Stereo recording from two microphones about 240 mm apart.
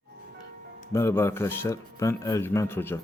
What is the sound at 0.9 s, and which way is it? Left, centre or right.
Speech, centre.